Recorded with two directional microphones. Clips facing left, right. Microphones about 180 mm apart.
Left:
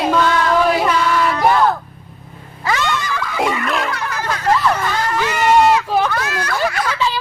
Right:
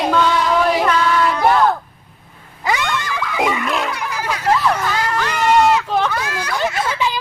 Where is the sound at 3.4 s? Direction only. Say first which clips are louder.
Even; centre (ahead or behind).